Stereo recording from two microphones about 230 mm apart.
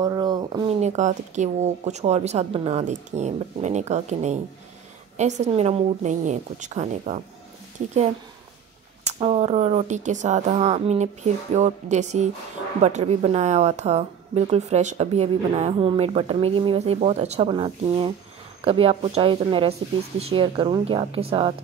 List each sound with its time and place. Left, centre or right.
0.0 s a woman's voice: centre
9.2 s a woman's voice: right